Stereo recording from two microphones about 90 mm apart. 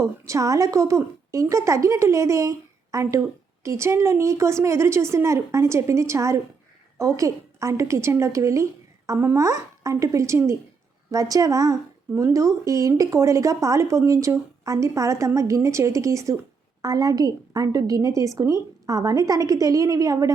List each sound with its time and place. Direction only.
0.0 s a woman's voice: 35° right (ahead or behind)
11.1 s a woman's voice: 40° right (ahead or behind)